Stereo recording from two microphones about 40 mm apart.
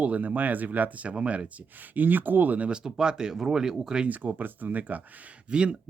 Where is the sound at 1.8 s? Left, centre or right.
Right.